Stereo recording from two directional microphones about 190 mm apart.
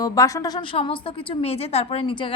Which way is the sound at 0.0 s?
20° left (ahead or behind).